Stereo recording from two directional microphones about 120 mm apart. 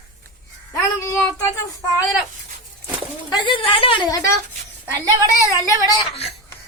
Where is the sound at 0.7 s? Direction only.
20° left (ahead or behind).